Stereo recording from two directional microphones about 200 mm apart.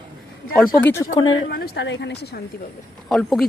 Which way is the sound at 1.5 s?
55° left (ahead or behind).